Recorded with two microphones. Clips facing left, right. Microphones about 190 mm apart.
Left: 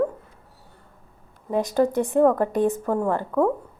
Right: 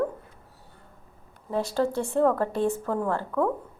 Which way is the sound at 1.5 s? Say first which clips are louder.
Left 5 dB; 15° left (ahead or behind).